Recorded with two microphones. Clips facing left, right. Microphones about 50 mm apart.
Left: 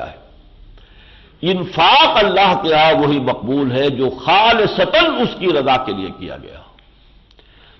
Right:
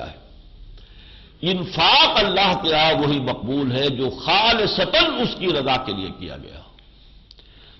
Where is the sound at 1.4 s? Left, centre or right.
Left.